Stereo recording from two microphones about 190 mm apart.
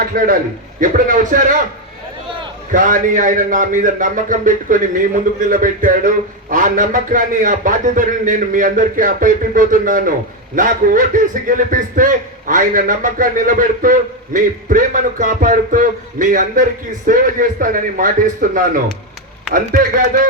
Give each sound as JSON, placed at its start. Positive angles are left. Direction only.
{"t": 0.8, "sound": "a man's voice", "side_deg": -45}
{"t": 2.7, "sound": "a man's voice", "side_deg": -45}